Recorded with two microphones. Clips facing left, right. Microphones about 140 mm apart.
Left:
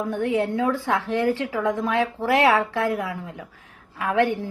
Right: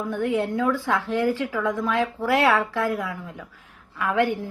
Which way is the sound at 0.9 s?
20° left (ahead or behind).